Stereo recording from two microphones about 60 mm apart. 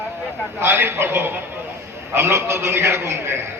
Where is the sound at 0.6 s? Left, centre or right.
Right.